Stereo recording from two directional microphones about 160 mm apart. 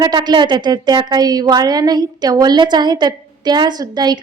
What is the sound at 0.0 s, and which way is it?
Speech, 25° right (ahead or behind).